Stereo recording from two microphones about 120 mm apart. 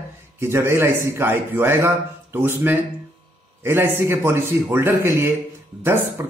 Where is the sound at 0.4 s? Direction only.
20° right (ahead or behind).